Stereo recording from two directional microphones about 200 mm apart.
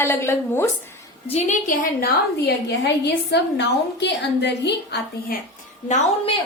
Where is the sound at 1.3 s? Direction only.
35° left (ahead or behind); by 5.4 s 55° left (ahead or behind).